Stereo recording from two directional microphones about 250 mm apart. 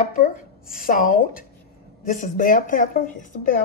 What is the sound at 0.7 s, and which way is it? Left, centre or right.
Speech, left.